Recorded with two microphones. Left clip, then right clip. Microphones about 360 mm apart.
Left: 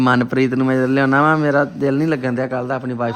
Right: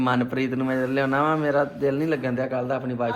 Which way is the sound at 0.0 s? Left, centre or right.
Left.